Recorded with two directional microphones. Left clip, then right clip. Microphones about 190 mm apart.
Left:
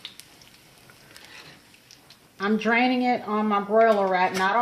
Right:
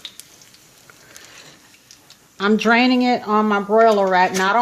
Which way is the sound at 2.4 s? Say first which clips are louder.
Right 6 dB; 55° right (ahead or behind).